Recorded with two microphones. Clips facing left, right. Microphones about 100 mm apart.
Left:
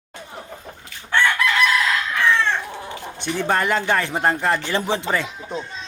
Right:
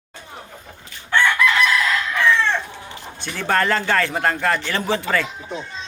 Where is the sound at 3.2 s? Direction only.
15° left (ahead or behind).